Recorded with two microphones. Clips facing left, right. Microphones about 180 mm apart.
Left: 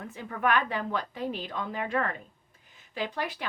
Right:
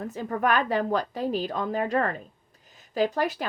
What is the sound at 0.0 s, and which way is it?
A woman's voice, 40° right (ahead or behind).